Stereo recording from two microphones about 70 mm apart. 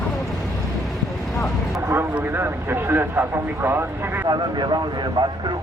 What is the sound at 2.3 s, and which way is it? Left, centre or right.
Speech, right.